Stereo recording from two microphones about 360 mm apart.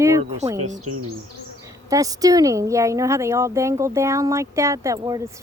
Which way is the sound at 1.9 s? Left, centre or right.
Centre.